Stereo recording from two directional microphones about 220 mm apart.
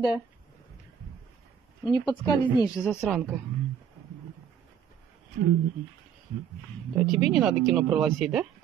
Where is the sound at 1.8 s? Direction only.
20° left (ahead or behind).